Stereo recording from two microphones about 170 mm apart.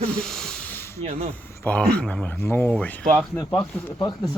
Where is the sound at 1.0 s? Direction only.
40° right (ahead or behind).